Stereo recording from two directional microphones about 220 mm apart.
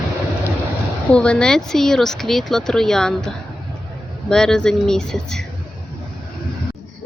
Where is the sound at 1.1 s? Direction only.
5° left (ahead or behind).